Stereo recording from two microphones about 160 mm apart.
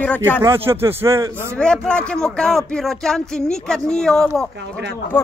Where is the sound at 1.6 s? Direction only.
5° left (ahead or behind).